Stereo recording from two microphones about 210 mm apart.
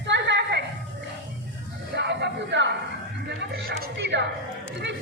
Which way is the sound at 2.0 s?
55° right (ahead or behind).